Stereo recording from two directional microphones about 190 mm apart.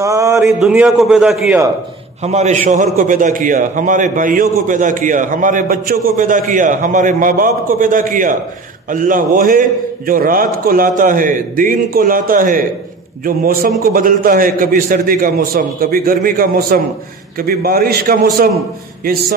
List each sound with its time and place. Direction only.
0.0 s speech: 15° right (ahead or behind)
0.6 s a man's voice: 5° right (ahead or behind)
2.2 s a man's voice: 35° right (ahead or behind)